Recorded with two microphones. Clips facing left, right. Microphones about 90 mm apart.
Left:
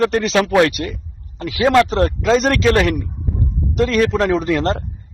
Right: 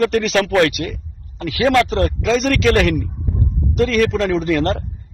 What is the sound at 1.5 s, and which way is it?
Speech, 20° left (ahead or behind).